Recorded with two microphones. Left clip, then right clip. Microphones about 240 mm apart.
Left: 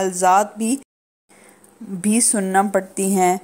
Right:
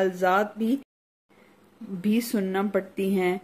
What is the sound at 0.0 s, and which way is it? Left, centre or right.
Speech, left.